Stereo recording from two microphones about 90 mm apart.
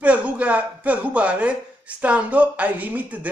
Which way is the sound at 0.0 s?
15° right (ahead or behind).